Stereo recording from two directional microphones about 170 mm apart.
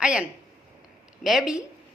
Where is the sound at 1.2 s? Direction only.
Centre (ahead or behind).